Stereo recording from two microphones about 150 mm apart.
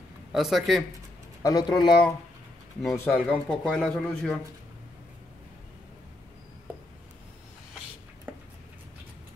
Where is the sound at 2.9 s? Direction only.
15° left (ahead or behind).